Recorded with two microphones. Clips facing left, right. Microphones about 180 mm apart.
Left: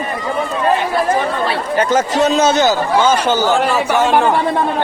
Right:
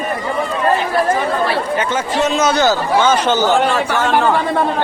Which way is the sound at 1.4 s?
40° left (ahead or behind).